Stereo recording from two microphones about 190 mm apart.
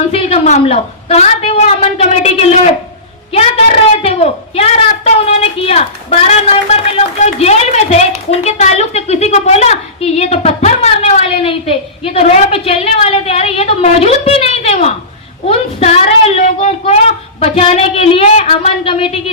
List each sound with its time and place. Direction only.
0.1 s a woman's voice: 35° left (ahead or behind)